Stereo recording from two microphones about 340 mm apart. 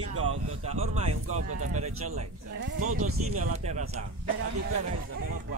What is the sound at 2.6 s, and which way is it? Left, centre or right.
Speech, right.